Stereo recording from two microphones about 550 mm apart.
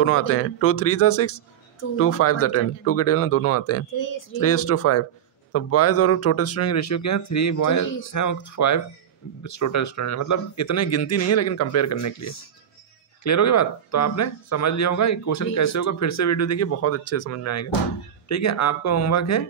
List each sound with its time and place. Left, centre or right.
0.0 s speech: left